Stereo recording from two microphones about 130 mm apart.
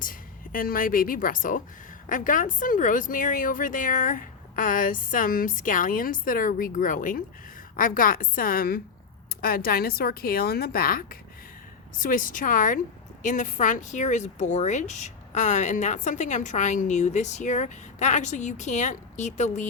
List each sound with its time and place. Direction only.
0.0 s a woman's voice: 90° left
10.8 s speech: 90° left
13.2 s speech: 75° left (ahead or behind)